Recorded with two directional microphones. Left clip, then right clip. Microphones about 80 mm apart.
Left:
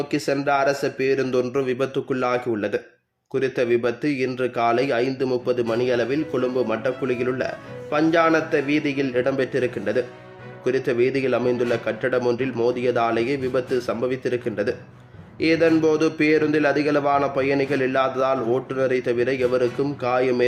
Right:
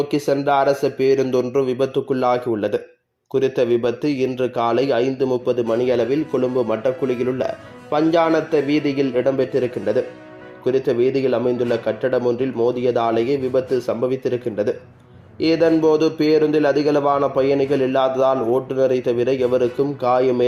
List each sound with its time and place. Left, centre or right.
0.7 s a man's voice: right; by 5.6 s centre
5.7 s a man's voice: right
9.2 s a man's voice: centre